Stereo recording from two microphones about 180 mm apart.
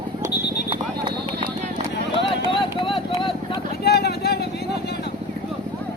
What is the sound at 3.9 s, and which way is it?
Vehicle, 65° left (ahead or behind).